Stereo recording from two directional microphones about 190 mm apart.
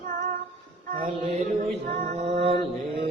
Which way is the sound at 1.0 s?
35° right (ahead or behind).